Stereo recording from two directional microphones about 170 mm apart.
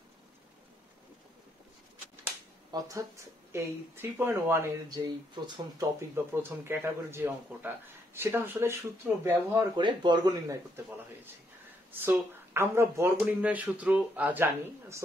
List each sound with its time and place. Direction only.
2.7 s speech: 20° right (ahead or behind)
9.8 s speech: 25° right (ahead or behind)
11.9 s speech: 10° right (ahead or behind)